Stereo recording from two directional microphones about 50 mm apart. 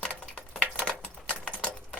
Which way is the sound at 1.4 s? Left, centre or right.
Left.